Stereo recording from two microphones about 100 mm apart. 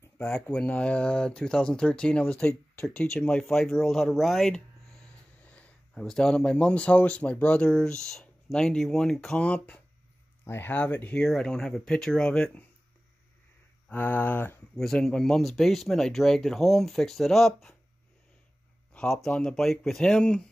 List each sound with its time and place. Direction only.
0.3 s speech: 10° left (ahead or behind)
5.4 s speech: 10° left (ahead or behind)
13.8 s speech: 15° left (ahead or behind)
14.8 s speech: 5° left (ahead or behind)
18.9 s speech: 5° left (ahead or behind)